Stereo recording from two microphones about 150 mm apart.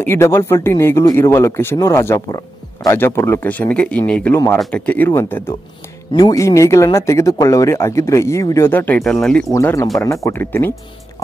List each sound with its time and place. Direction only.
0.0 s speech: 15° left (ahead or behind)
9.5 s speech: 20° left (ahead or behind)